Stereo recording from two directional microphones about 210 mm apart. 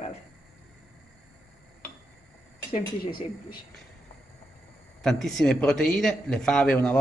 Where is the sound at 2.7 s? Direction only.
25° left (ahead or behind).